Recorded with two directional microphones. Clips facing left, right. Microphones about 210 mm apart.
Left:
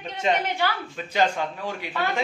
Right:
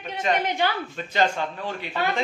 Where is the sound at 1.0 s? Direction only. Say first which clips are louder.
Left 1 dB; 10° left (ahead or behind).